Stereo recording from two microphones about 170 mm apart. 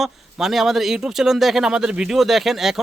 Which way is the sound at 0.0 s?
Centre (ahead or behind).